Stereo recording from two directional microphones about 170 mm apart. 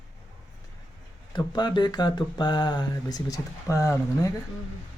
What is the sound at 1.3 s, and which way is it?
Speech, 25° left (ahead or behind).